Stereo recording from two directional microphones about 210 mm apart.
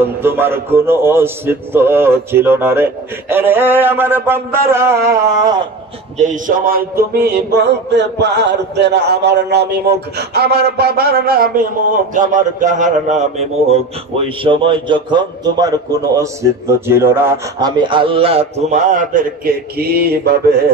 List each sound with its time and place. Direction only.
0.0 s a man's voice: 10° right (ahead or behind)
6.1 s a sound: 35° right (ahead or behind)
12.1 s a man's voice: 40° right (ahead or behind)